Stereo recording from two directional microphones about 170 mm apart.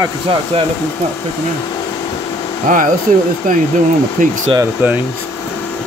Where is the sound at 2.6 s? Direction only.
50° right (ahead or behind).